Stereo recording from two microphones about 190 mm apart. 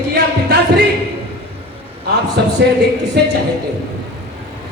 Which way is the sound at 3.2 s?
55° right (ahead or behind).